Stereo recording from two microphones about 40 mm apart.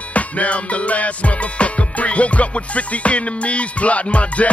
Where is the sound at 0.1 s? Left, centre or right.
Left.